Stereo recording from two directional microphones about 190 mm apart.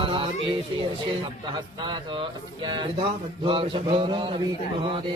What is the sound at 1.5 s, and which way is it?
A man's voice, 25° right (ahead or behind).